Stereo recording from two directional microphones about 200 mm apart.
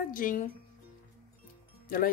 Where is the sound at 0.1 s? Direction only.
40° left (ahead or behind).